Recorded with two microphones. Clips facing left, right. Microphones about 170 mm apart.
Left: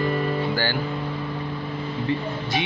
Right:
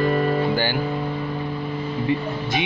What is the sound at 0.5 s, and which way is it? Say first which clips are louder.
Music: right 3 dB; 15° right (ahead or behind).